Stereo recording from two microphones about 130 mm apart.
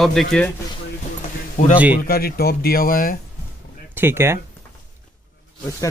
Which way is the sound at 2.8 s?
90° left.